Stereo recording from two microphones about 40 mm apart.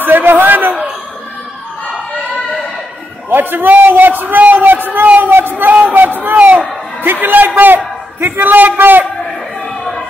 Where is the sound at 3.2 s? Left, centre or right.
Right.